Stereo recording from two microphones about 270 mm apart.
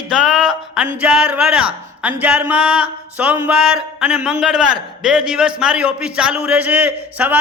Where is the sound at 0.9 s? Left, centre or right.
Centre.